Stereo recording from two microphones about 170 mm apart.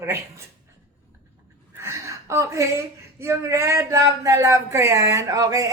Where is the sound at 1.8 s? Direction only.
15° right (ahead or behind).